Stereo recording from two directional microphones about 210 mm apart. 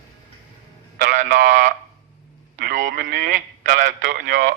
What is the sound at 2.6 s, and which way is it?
A man's voice, 40° right (ahead or behind).